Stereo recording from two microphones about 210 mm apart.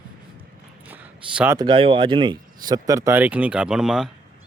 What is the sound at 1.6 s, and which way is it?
Speech, 25° right (ahead or behind).